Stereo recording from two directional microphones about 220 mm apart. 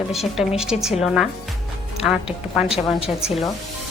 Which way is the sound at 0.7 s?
30° left (ahead or behind).